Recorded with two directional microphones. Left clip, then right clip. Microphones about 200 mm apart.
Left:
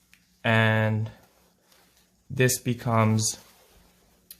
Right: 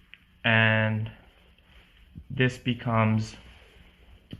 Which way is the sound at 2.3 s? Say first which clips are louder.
Left 2 dB; 55° left (ahead or behind).